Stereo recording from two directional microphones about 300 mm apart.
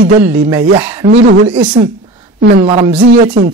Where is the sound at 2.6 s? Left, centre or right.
Centre.